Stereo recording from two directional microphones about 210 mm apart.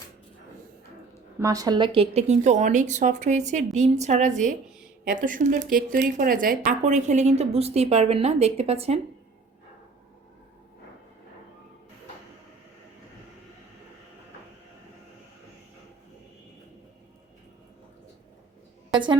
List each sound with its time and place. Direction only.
1.4 s a woman's voice: 15° right (ahead or behind)